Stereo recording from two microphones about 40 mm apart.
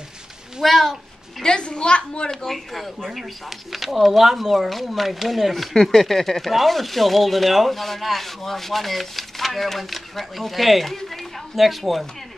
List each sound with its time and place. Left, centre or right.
0.6 s speech: centre
1.4 s a child's voice: left
2.4 s speech: centre